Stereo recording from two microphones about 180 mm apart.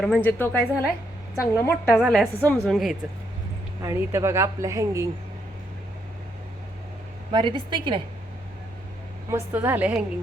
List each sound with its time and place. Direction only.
0.0 s speech: 10° left (ahead or behind)
2.0 s a woman's voice: centre (ahead or behind)
3.8 s a woman's voice: 15° right (ahead or behind)
7.3 s a woman's voice: 25° right (ahead or behind)
9.3 s a woman's voice: 10° right (ahead or behind)